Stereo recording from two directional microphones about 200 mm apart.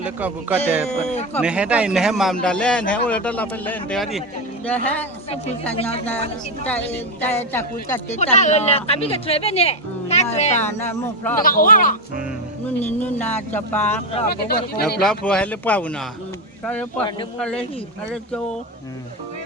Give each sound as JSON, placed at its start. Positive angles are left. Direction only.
{"t": 0.0, "sound": "a man's voice", "side_deg": -10}
{"t": 6.7, "sound": "a woman's voice", "side_deg": 10}
{"t": 8.1, "sound": "speech", "side_deg": 35}
{"t": 10.8, "sound": "a woman's voice", "side_deg": 10}
{"t": 11.4, "sound": "speech", "side_deg": 45}
{"t": 12.6, "sound": "a woman's voice", "side_deg": 10}
{"t": 14.3, "sound": "speech", "side_deg": 50}
{"t": 15.0, "sound": "a man's voice", "side_deg": 5}
{"t": 17.4, "sound": "a man's voice", "side_deg": 5}